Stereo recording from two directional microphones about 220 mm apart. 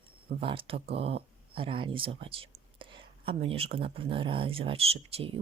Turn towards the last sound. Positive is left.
turn(degrees=-25)  # may be behind; listen again after turning